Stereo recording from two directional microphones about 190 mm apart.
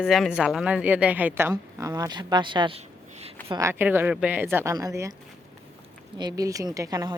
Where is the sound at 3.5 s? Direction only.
15° right (ahead or behind).